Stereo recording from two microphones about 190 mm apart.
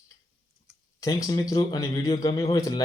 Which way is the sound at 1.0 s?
20° left (ahead or behind).